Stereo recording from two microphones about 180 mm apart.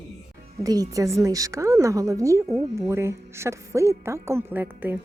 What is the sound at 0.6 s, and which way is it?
A woman's voice, 20° right (ahead or behind).